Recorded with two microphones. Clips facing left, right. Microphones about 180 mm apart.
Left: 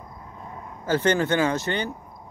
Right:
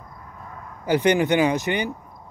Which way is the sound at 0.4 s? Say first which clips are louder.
Left 1 dB; 25° left (ahead or behind).